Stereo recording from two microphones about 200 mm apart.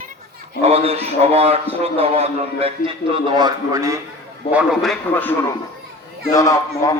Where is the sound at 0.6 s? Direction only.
30° right (ahead or behind).